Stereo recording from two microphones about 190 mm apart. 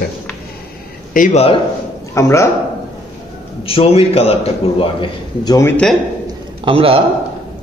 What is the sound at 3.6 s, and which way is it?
A man's voice, 30° left (ahead or behind).